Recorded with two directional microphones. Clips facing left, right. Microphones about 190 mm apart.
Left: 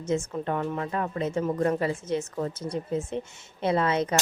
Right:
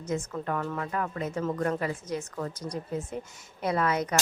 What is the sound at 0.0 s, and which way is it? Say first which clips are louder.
Speech: left 4 dB; 25° left (ahead or behind).